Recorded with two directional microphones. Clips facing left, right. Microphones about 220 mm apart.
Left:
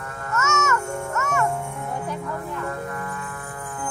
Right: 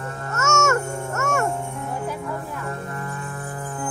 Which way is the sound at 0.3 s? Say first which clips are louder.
Right 3 dB; 45° right (ahead or behind).